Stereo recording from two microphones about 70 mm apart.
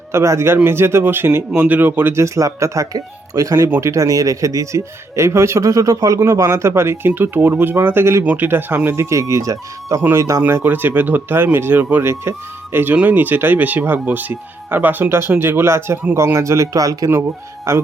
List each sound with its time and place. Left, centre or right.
0.1 s a man's voice: right
8.2 s speech: centre
9.0 s speech: right
10.4 s speech: right
17.7 s speech: right